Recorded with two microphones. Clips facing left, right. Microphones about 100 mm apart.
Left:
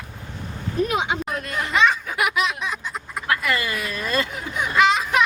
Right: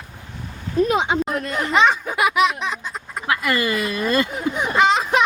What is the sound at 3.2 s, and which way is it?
Speech, 20° right (ahead or behind).